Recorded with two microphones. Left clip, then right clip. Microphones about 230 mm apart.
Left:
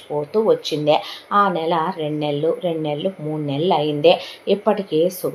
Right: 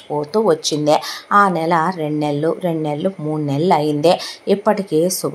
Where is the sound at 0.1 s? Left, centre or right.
Right.